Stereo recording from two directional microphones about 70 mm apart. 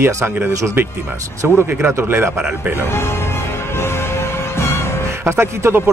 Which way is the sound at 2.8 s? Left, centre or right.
Left.